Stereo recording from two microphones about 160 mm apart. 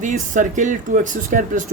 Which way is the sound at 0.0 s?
50° right (ahead or behind).